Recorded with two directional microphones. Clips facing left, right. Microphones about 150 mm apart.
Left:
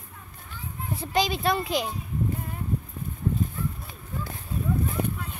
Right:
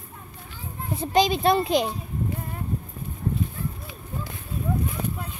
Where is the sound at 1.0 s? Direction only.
20° right (ahead or behind).